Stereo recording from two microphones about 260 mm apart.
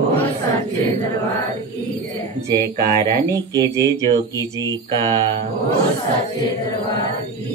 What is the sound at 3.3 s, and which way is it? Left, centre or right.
Mantra, centre.